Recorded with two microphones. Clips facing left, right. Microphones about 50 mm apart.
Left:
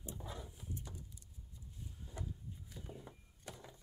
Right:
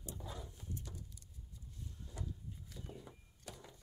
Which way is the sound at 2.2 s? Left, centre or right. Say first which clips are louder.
Right 3 dB; centre.